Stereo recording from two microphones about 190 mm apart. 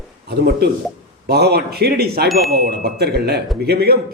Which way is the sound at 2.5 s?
55° right (ahead or behind).